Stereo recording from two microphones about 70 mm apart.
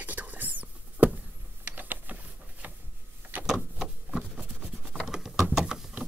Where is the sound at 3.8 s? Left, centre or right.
Centre.